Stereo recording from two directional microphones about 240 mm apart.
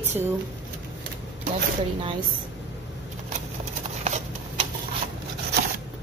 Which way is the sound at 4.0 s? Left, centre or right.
Right.